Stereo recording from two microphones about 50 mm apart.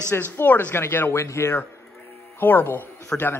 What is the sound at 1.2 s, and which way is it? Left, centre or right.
A man's voice, left.